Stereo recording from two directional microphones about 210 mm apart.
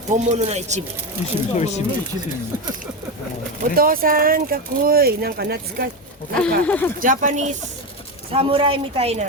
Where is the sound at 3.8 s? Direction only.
40° right (ahead or behind).